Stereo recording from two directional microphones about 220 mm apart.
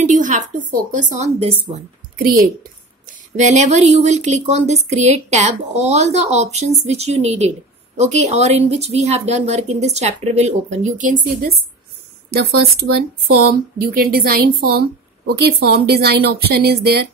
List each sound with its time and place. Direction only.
0.0 s speech: 35° right (ahead or behind)